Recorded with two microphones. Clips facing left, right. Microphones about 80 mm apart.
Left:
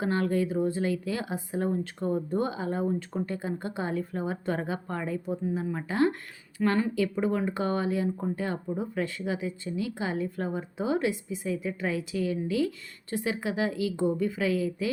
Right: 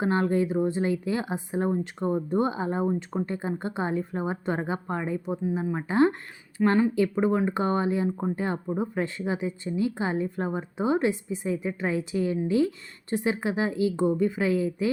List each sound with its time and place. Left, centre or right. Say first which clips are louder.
0.0 s speech: right 3 dB; right